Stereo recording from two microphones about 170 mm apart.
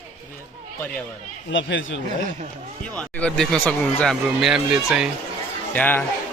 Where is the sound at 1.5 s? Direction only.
90° left.